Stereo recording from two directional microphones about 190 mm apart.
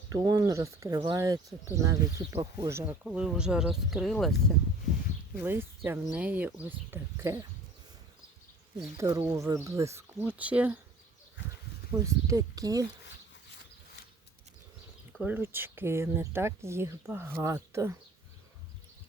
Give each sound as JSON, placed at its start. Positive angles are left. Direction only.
{"t": 0.1, "sound": "speech", "side_deg": -20}
{"t": 5.4, "sound": "speech", "side_deg": -10}
{"t": 9.0, "sound": "speech", "side_deg": -15}
{"t": 11.9, "sound": "speech", "side_deg": -15}
{"t": 15.2, "sound": "speech", "side_deg": -10}